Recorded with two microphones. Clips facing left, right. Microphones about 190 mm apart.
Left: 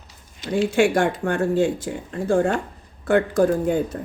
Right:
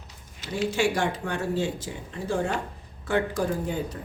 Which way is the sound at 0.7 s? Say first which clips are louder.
Left 6 dB; 55° left (ahead or behind).